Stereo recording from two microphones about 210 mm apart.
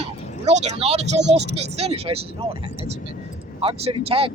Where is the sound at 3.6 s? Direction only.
25° right (ahead or behind).